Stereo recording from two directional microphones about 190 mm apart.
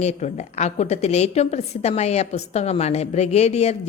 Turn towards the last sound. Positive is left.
turn(degrees=35)  # may be behind; listen again after turning